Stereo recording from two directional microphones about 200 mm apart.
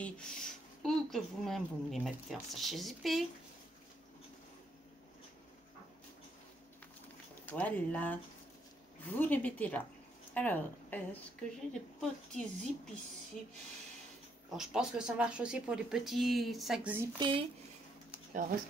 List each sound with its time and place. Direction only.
0.0 s speech: 5° left (ahead or behind)
7.4 s a woman's voice: 5° left (ahead or behind)
14.5 s speech: centre (ahead or behind)
17.2 s speech: 25° right (ahead or behind)